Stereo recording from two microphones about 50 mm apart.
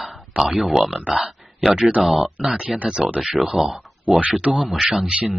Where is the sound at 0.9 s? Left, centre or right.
Right.